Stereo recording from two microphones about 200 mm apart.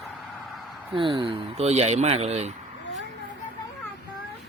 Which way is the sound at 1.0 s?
25° right (ahead or behind).